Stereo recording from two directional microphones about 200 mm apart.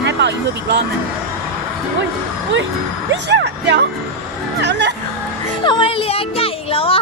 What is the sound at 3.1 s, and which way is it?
Speech, 60° right (ahead or behind).